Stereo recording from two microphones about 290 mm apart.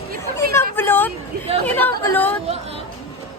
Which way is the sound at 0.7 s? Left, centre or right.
Centre.